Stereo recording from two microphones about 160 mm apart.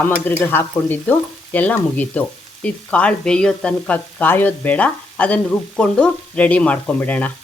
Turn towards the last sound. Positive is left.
turn(degrees=10)  # may be behind; listen again after turning